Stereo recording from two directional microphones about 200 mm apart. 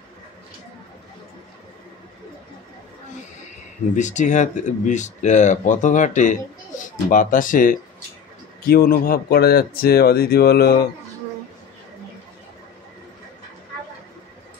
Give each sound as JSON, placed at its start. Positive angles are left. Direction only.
{"t": 3.9, "sound": "speech", "side_deg": 35}